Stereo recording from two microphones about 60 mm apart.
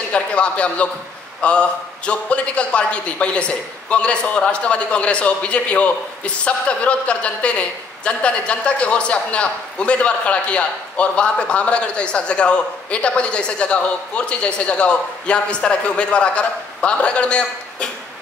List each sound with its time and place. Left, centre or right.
0.1 s a man's voice: centre